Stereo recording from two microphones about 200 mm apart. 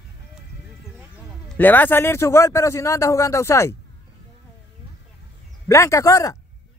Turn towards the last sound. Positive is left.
turn(degrees=15)  # may be behind; listen again after turning